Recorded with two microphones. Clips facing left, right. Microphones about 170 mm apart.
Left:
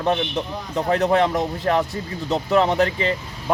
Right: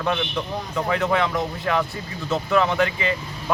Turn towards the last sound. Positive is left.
turn(degrees=35)  # may be behind; listen again after turning